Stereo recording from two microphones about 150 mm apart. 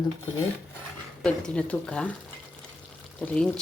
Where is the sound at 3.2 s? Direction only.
5° left (ahead or behind).